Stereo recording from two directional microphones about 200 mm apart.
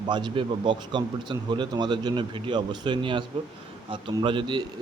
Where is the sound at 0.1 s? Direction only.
25° right (ahead or behind).